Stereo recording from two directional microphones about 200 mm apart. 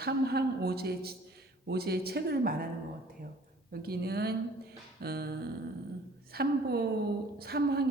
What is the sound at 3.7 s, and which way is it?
A woman's voice, 50° right (ahead or behind).